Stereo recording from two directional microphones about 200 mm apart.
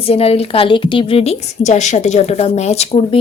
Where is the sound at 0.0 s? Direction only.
30° left (ahead or behind).